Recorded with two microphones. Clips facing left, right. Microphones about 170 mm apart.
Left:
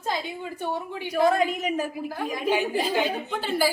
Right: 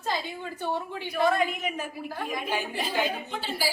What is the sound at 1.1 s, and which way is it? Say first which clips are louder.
Speech: left 3 dB; 40° left (ahead or behind).